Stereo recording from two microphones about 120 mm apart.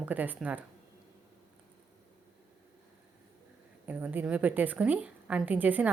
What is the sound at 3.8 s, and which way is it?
A woman's voice, 15° right (ahead or behind).